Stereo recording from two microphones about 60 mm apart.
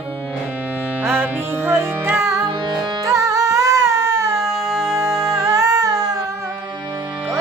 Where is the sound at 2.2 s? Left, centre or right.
Right.